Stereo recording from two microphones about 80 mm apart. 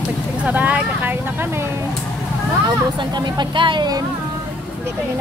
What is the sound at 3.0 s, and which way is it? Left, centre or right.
Speech, right.